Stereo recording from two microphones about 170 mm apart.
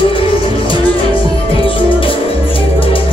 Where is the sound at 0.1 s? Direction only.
30° left (ahead or behind).